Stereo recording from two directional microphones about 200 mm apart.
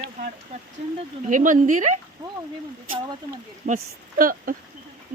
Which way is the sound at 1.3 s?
40° right (ahead or behind).